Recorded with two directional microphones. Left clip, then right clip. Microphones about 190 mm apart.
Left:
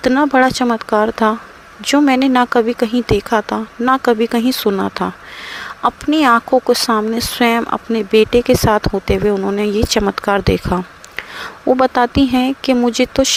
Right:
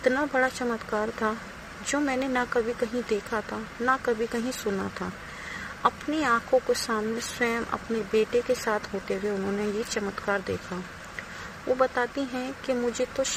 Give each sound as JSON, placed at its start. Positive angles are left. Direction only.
{"t": 0.0, "sound": "speech", "side_deg": 50}
{"t": 11.8, "sound": "speech", "side_deg": 55}